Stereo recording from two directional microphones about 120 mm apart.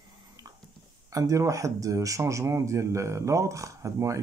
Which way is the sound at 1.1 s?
25° right (ahead or behind).